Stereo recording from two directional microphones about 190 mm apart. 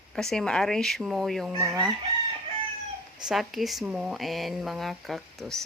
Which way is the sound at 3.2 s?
Centre (ahead or behind).